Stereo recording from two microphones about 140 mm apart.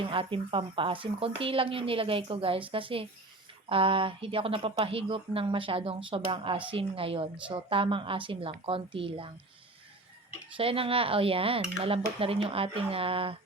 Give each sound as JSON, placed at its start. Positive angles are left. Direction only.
{"t": 0.1, "sound": "speech", "side_deg": -40}
{"t": 10.6, "sound": "speech", "side_deg": -40}